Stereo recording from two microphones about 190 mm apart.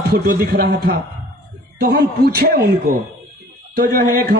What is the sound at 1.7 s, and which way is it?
A man's voice, 55° right (ahead or behind).